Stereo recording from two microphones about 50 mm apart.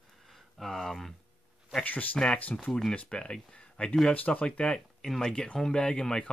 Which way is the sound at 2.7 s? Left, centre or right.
Centre.